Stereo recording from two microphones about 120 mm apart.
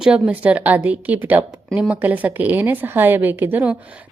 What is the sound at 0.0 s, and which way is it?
A woman's voice, 10° right (ahead or behind).